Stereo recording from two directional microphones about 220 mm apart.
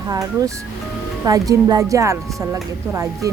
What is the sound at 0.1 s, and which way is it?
A woman's voice, 15° right (ahead or behind).